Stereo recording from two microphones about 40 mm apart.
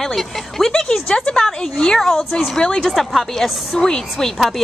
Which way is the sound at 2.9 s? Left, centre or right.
Centre.